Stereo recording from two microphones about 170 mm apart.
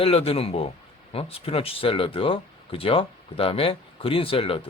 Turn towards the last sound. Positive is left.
turn(degrees=35)  # may be behind; listen again after turning